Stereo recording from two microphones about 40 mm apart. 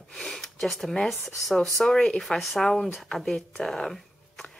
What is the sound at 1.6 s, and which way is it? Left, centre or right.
Speech, centre.